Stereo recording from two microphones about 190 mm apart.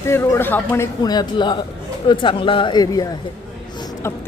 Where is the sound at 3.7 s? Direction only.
20° left (ahead or behind).